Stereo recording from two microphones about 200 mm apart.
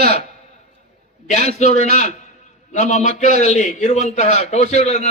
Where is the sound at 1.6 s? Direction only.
35° left (ahead or behind).